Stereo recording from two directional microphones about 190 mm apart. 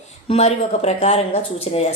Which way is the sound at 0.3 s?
35° left (ahead or behind).